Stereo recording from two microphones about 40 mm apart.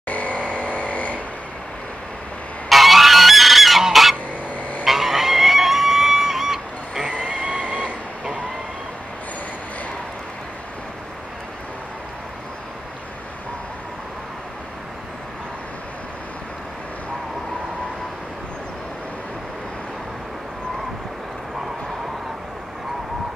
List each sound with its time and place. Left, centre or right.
0.1 s vehicle: left
2.7 s goose: centre; by 7.9 s right